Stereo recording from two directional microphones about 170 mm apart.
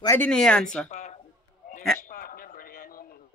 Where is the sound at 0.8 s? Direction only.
45° left (ahead or behind).